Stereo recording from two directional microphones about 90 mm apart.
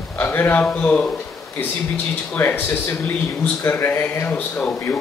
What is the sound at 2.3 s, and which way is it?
Speech, 15° left (ahead or behind).